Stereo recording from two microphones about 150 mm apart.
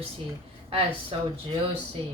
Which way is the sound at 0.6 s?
40° right (ahead or behind).